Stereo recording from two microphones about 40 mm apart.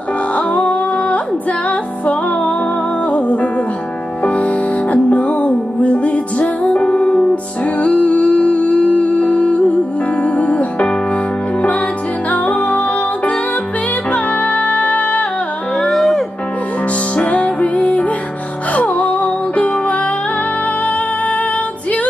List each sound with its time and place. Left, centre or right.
0.4 s music: left
12.3 s music: left
15.8 s music: centre
17.1 s music: left